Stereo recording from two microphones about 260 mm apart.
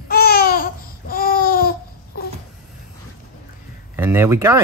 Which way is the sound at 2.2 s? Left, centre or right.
Left.